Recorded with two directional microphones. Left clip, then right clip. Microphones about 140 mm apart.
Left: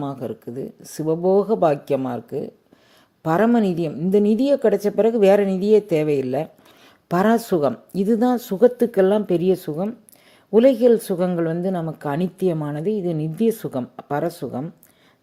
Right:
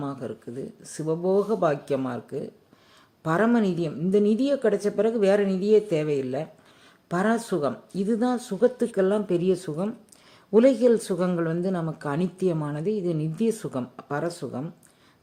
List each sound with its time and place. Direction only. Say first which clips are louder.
0.0 s a woman's voice: left 5 dB; 40° left (ahead or behind)